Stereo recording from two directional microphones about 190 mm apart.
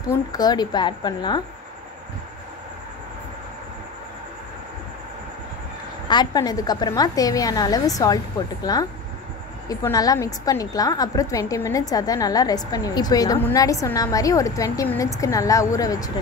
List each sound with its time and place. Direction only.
0.1 s a woman's voice: 20° left (ahead or behind)
6.0 s a woman's voice: 20° left (ahead or behind)